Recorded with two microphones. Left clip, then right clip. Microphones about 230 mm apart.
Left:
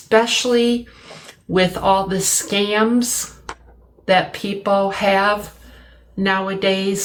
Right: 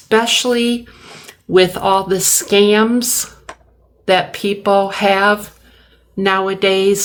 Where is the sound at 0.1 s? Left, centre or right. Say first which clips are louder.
Right 2 dB; right.